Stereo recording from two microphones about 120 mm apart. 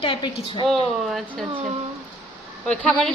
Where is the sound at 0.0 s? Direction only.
45° left (ahead or behind).